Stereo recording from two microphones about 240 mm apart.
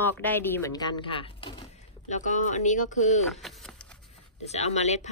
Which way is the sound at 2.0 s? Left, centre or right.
Left.